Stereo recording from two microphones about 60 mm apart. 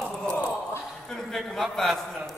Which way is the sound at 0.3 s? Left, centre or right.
Left.